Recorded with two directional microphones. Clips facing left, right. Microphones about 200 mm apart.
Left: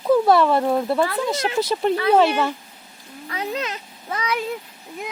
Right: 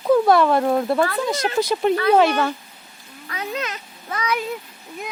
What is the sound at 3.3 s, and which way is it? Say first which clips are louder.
A child's voice: left 1 dB; 30° left (ahead or behind).